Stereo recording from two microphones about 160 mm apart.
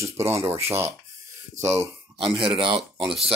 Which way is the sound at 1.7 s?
40° right (ahead or behind).